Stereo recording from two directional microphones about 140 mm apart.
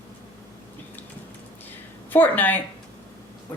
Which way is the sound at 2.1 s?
15° left (ahead or behind).